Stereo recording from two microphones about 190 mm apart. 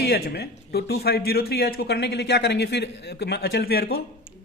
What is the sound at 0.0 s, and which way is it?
Speech, 55° left (ahead or behind).